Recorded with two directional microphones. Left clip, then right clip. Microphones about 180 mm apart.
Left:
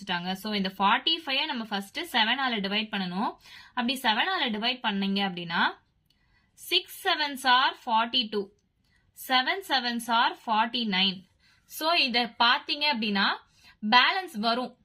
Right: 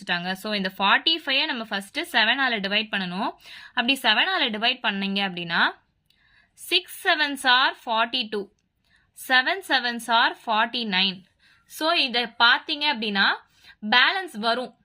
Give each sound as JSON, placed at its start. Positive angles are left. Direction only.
{"t": 0.0, "sound": "speech", "side_deg": -35}